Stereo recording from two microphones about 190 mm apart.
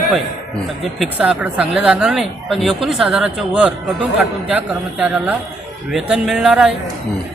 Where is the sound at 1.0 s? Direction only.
5° right (ahead or behind).